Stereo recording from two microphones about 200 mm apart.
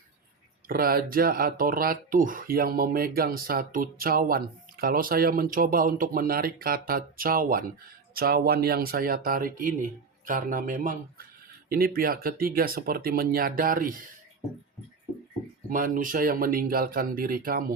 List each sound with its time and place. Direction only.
0.7 s speech: 45° right (ahead or behind)
15.7 s speech: 45° right (ahead or behind)